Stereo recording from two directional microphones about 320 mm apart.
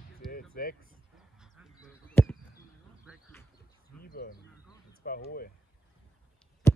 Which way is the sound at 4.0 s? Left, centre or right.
Left.